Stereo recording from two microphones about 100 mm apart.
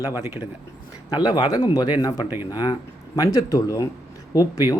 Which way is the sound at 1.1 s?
50° left (ahead or behind).